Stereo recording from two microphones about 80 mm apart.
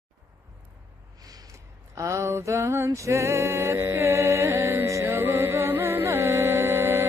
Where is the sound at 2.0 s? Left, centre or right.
Right.